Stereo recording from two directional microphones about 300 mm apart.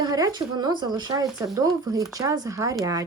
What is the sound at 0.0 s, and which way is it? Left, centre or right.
A woman's voice, centre.